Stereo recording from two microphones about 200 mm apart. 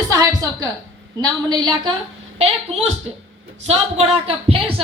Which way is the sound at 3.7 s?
30° right (ahead or behind).